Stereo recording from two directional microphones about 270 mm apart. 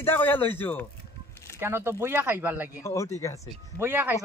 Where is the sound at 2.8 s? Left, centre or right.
Centre.